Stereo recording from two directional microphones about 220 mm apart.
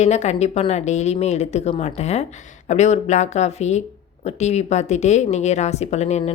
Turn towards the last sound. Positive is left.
turn(degrees=30)  # may be behind; listen again after turning